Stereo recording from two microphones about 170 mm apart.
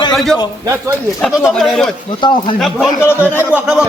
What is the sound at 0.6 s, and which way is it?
Speech, 20° right (ahead or behind).